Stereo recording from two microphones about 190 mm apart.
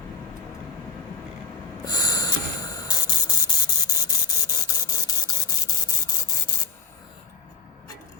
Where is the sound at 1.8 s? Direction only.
20° left (ahead or behind).